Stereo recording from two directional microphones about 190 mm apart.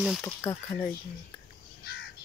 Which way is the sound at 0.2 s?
15° left (ahead or behind).